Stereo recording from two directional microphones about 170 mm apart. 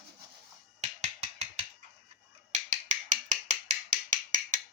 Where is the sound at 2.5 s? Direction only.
45° right (ahead or behind).